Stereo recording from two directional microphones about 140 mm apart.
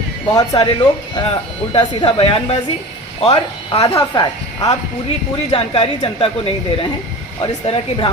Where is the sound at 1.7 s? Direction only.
40° left (ahead or behind).